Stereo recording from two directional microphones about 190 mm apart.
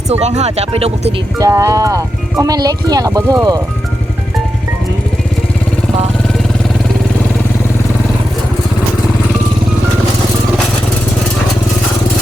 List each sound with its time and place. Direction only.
0.1 s speech: 35° right (ahead or behind)
1.4 s speech: 15° right (ahead or behind)